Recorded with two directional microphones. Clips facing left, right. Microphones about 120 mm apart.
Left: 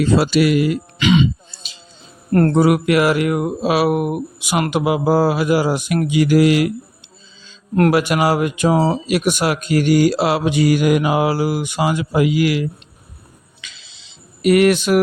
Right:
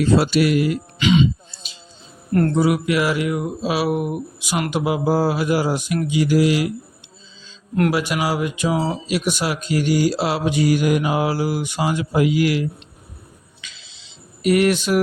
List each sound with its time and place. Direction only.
0.0 s speech: 90° left
2.3 s speech: 50° left (ahead or behind)
4.7 s a sound: 75° left (ahead or behind); by 6.7 s 60° left (ahead or behind)
7.8 s speech: 55° left (ahead or behind); by 12.6 s 90° left
13.6 s insect: 75° left (ahead or behind)
14.4 s a sound: 70° left (ahead or behind)